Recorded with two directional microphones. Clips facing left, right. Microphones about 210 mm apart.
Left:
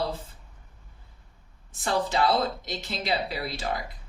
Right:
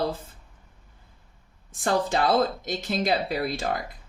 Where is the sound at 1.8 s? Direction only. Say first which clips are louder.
Right 2 dB; 50° right (ahead or behind).